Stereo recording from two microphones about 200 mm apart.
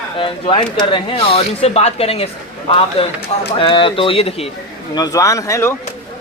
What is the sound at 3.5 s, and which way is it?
Speech, 25° left (ahead or behind).